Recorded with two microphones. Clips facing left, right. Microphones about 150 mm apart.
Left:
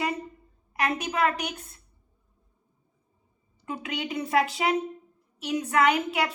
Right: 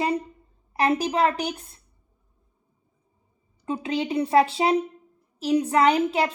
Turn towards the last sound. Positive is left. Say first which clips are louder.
# right 4 dB
turn(degrees=-30)  # may be behind; listen again after turning